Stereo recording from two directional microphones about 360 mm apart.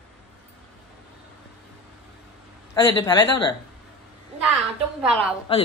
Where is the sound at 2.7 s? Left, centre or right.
Centre.